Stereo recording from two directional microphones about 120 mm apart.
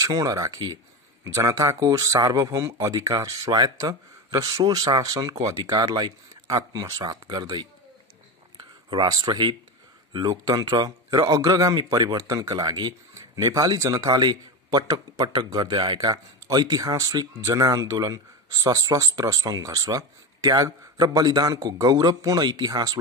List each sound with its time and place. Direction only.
0.0 s a man's voice: 30° right (ahead or behind)
8.9 s a man's voice: 35° right (ahead or behind)